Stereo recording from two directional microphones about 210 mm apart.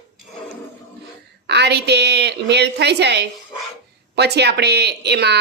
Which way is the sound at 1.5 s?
50° right (ahead or behind).